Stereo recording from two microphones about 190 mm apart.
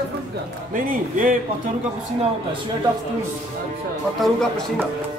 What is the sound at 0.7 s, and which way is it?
Speech, 45° right (ahead or behind).